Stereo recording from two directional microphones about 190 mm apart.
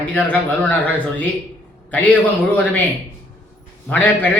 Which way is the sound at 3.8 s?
10° left (ahead or behind).